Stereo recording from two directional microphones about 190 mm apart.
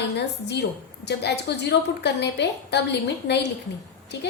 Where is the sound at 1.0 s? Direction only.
65° left (ahead or behind).